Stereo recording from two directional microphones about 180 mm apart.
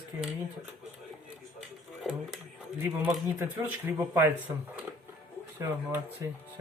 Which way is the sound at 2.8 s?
10° right (ahead or behind).